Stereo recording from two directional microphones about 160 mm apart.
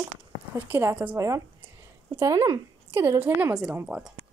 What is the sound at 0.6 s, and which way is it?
A woman's voice, 15° right (ahead or behind).